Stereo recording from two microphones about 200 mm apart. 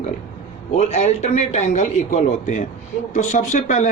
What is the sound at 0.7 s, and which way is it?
A man's voice, 35° left (ahead or behind).